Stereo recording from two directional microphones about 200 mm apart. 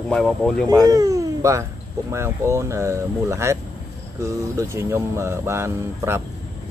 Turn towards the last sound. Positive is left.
turn(degrees=-15)  # may be behind; listen again after turning